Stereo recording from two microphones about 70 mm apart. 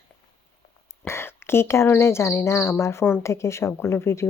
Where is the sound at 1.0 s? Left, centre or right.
Left.